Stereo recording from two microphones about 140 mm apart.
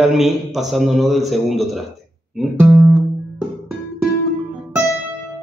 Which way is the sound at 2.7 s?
15° right (ahead or behind).